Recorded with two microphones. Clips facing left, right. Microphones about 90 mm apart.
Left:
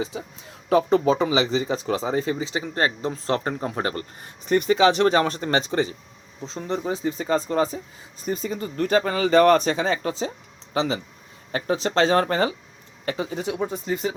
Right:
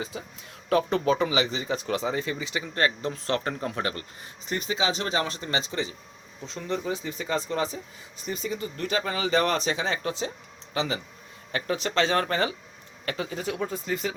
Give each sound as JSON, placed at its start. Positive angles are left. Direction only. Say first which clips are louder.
{"t": 0.7, "sound": "speech", "louder": "left 5 dB", "side_deg": 30}
{"t": 6.4, "sound": "speech", "louder": "left 3 dB", "side_deg": 35}